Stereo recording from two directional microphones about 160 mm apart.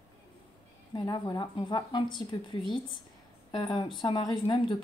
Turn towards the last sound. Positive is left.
turn(degrees=30)  # may be behind; listen again after turning